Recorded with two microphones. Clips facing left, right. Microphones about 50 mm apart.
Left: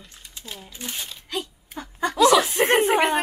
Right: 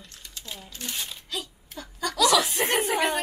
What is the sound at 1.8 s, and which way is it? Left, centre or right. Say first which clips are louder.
A woman's voice: left 6 dB; left.